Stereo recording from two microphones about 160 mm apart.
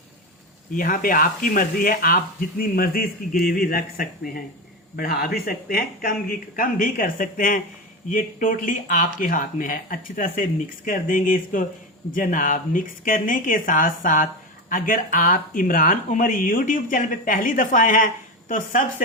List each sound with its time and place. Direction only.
0.7 s speech: 60° left (ahead or behind)